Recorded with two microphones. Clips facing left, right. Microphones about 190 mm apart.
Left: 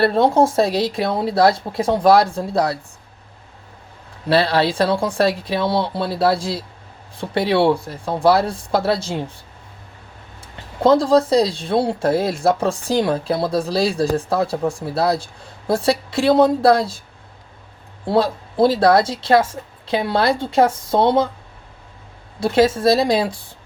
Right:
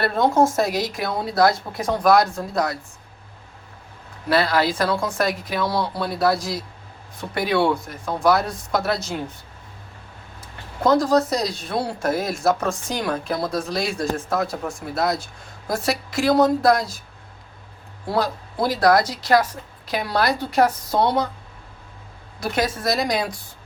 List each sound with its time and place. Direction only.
0.0 s speech: 30° left (ahead or behind)
4.3 s speech: 30° left (ahead or behind)
10.4 s speech: 30° left (ahead or behind)
18.0 s speech: 25° left (ahead or behind)
22.4 s speech: 25° left (ahead or behind)